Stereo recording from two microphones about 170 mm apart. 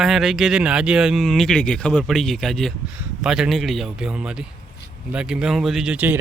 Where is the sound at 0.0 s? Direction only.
Centre (ahead or behind).